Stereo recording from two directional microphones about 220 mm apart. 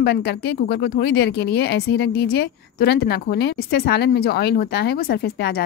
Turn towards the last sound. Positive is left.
turn(degrees=45)  # may be behind; listen again after turning